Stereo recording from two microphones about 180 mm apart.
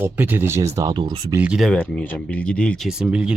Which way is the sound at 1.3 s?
5° right (ahead or behind).